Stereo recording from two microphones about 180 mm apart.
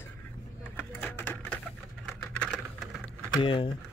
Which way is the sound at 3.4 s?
30° left (ahead or behind).